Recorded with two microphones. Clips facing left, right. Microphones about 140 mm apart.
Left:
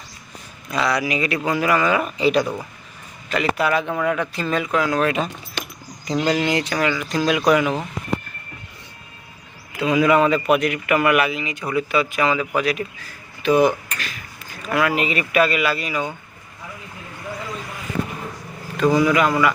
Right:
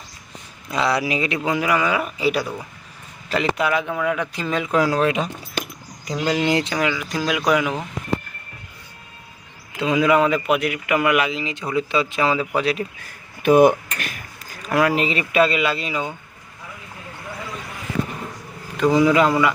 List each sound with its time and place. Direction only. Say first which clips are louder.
0.7 s speech: even; 25° right (ahead or behind)
1.5 s speech: left 2 dB; 15° right (ahead or behind)
3.6 s speech: left 1 dB; 10° right (ahead or behind)
4.7 s speech: right 3 dB; 35° right (ahead or behind)
5.0 s speech: right 1 dB; 15° right (ahead or behind)
6.4 s speech: right 1 dB; 25° right (ahead or behind)
6.7 s speech: left 2 dB; 10° right (ahead or behind)
9.7 s speech: left 1 dB; 20° right (ahead or behind)
13.4 s speech: right 3 dB; 55° right (ahead or behind)
14.7 s speech: right 1 dB; 35° right (ahead or behind)
18.8 s speech: right 1 dB; 20° right (ahead or behind)